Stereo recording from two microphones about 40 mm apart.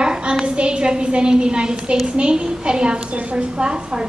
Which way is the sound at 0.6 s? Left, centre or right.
Right.